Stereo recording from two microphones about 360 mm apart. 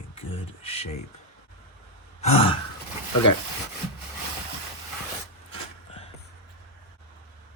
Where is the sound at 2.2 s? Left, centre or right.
Centre.